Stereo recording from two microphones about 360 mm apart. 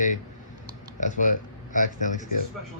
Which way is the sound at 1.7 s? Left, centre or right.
Left.